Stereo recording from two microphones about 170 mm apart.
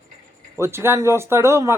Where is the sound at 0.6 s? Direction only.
15° right (ahead or behind).